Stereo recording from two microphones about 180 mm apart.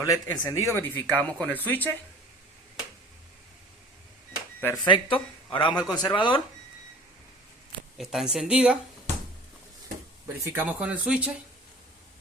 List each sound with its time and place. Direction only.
0.0 s speech: 20° left (ahead or behind)
4.6 s a man's voice: 20° left (ahead or behind)
7.9 s speech: centre (ahead or behind)
10.4 s speech: 10° right (ahead or behind)